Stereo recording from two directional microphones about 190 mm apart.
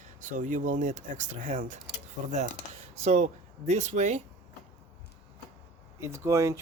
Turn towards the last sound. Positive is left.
turn(degrees=-15)  # may be behind; listen again after turning